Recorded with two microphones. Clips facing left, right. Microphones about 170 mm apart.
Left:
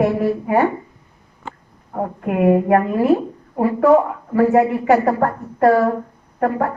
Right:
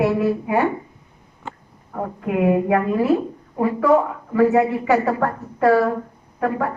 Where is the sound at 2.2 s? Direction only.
50° left (ahead or behind).